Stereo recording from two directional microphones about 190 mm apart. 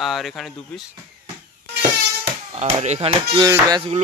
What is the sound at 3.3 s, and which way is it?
Music, 20° right (ahead or behind).